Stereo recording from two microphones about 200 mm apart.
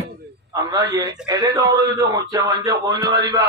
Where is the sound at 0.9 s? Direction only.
20° right (ahead or behind).